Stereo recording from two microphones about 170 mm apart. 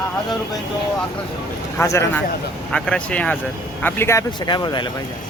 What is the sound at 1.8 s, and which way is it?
Speech, 15° left (ahead or behind).